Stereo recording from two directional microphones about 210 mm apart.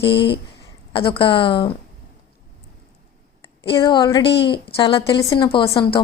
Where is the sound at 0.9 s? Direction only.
25° left (ahead or behind).